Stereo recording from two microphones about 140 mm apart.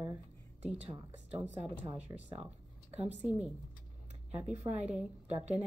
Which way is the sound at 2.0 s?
15° right (ahead or behind).